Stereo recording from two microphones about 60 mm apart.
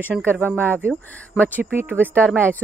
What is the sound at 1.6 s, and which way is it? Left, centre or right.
Speech, right.